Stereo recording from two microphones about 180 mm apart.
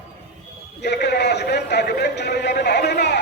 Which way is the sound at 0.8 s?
70° left (ahead or behind).